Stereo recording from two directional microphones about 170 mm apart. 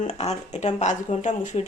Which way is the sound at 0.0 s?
40° left (ahead or behind).